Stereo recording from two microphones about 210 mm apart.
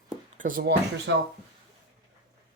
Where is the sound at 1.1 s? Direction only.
60° right (ahead or behind).